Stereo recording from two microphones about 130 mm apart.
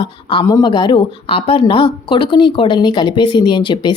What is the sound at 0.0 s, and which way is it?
Speech, 40° left (ahead or behind).